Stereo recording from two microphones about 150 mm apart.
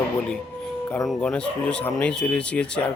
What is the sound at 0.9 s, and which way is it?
Speech, 20° left (ahead or behind).